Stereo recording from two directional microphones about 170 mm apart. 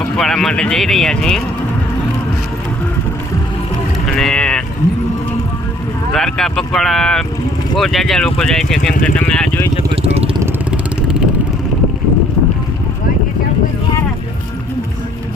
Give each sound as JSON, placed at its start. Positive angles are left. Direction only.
{"t": 0.0, "sound": "speech", "side_deg": 5}
{"t": 4.0, "sound": "vehicle", "side_deg": 5}
{"t": 6.1, "sound": "speech", "side_deg": 5}
{"t": 9.9, "sound": "vehicle", "side_deg": -35}
{"t": 10.4, "sound": "vehicle", "side_deg": -5}